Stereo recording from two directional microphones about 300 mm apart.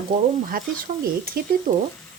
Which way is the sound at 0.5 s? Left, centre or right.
Right.